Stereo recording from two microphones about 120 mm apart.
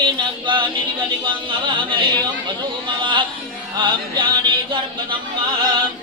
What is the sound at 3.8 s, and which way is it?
Music, 40° right (ahead or behind).